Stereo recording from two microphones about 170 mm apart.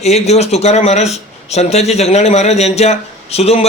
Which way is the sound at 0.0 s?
40° left (ahead or behind).